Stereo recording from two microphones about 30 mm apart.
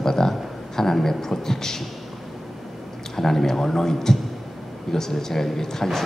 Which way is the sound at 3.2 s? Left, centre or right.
Centre.